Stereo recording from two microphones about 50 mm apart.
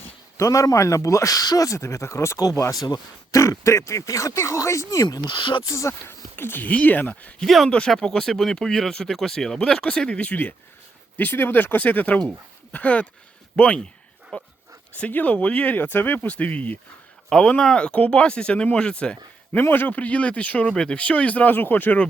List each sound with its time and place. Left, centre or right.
0.3 s speech: left
6.3 s speech: left
6.7 s speech: left
7.4 s speech: centre; by 10.3 s left
11.2 s speech: left
16.2 s speech: left
17.2 s speech: centre
19.7 s speech: left
20.0 s speech: left
20.7 s speech: centre
21.0 s speech: left